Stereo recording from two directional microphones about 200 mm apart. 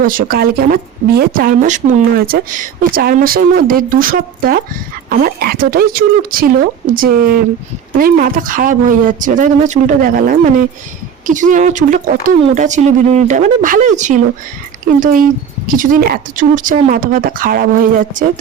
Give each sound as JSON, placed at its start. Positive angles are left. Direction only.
{"t": 0.0, "sound": "speech", "side_deg": -45}